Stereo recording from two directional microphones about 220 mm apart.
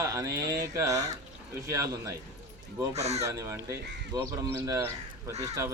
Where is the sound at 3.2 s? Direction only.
15° right (ahead or behind).